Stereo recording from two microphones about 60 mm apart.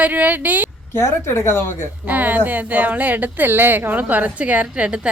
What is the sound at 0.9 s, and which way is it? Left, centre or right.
Speech, left.